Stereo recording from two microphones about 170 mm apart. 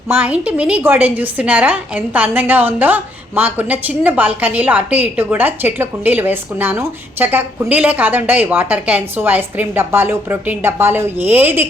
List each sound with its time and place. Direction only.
0.1 s a woman's voice: 10° right (ahead or behind)